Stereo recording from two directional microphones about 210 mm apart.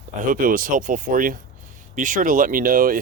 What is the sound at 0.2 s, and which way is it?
Speech, 40° right (ahead or behind).